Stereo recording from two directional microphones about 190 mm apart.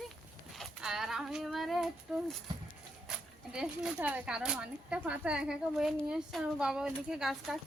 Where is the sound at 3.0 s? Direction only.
5° right (ahead or behind).